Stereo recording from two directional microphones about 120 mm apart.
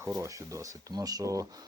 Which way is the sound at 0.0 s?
25° right (ahead or behind).